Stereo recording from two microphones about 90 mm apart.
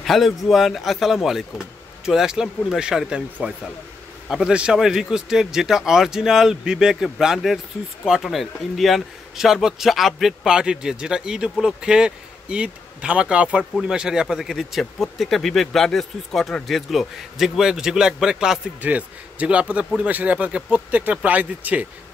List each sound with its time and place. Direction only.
0.0 s speech: centre (ahead or behind)
4.3 s speech: 5° right (ahead or behind)